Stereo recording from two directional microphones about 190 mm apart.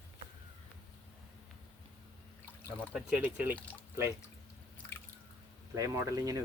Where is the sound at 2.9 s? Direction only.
5° right (ahead or behind).